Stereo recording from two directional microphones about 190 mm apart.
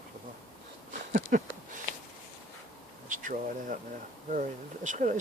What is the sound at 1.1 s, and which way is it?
Speech, 45° right (ahead or behind).